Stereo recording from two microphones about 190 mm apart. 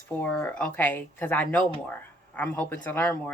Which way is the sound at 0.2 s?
5° left (ahead or behind).